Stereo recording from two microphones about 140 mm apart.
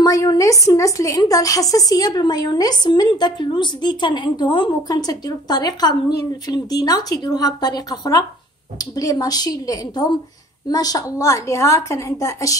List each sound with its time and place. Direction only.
0.0 s a woman's voice: 25° left (ahead or behind)